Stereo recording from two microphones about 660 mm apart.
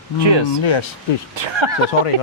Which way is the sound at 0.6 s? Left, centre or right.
Left.